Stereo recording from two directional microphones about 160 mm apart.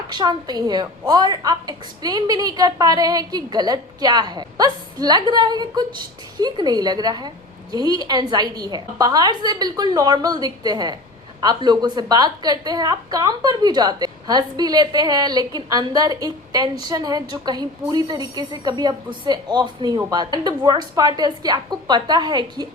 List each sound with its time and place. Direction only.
0.1 s a woman's voice: 25° right (ahead or behind)